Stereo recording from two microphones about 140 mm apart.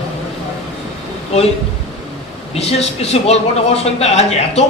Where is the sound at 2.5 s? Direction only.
50° left (ahead or behind).